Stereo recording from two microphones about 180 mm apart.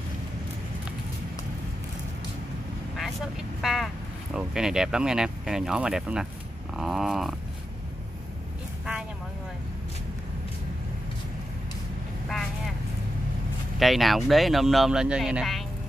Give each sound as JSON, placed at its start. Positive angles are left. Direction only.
{"t": 3.0, "sound": "vehicle", "side_deg": 0}
{"t": 6.8, "sound": "speech", "side_deg": 0}
{"t": 12.3, "sound": "vehicle", "side_deg": 0}
{"t": 13.7, "sound": "speech", "side_deg": 0}